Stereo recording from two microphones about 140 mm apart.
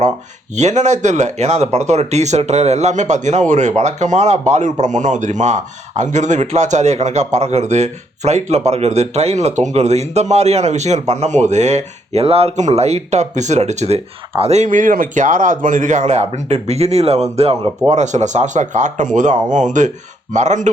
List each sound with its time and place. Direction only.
0.5 s speech: 55° right (ahead or behind)